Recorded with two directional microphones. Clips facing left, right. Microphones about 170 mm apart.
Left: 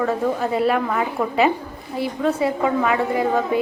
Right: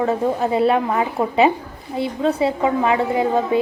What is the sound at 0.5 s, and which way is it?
A woman's voice, 25° right (ahead or behind).